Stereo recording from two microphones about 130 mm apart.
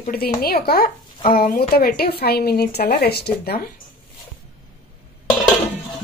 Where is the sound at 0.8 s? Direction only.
90° left.